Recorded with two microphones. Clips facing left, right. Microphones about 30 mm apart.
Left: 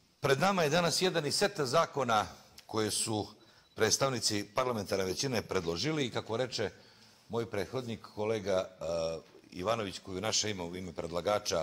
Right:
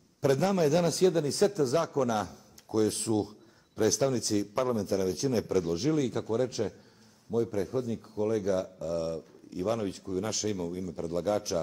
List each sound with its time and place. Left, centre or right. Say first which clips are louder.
0.2 s a man's voice: right 3 dB; left
3.1 s a sound: right 6 dB; left
4.0 s speech: right 4 dB; left
7.5 s speech: right 5 dB; left